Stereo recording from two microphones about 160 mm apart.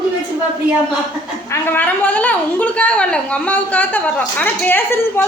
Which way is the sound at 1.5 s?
10° left (ahead or behind).